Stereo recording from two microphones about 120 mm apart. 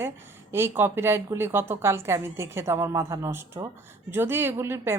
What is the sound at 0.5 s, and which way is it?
Speech, 20° right (ahead or behind).